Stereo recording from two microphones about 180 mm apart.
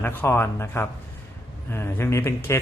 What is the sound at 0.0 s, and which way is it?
A man's voice, 10° left (ahead or behind).